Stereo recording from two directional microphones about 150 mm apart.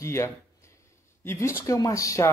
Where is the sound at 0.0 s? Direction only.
20° left (ahead or behind).